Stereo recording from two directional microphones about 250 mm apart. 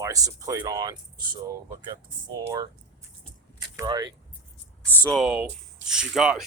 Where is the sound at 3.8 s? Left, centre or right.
Centre.